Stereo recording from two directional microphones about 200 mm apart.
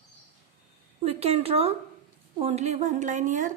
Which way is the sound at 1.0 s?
30° right (ahead or behind).